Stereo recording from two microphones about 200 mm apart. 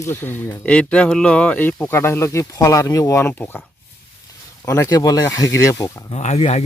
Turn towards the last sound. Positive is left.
turn(degrees=30)  # may be behind; listen again after turning